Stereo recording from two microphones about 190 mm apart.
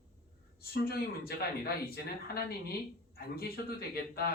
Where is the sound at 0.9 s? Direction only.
55° left (ahead or behind).